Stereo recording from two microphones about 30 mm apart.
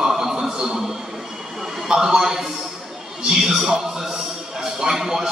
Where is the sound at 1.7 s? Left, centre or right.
Centre.